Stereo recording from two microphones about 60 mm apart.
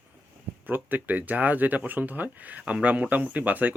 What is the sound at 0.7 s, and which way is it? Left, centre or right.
Speech, right.